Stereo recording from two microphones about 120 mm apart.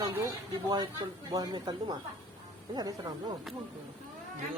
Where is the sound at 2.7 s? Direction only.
35° right (ahead or behind).